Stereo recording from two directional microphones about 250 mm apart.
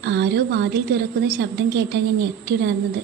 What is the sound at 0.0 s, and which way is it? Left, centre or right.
A woman's voice, right.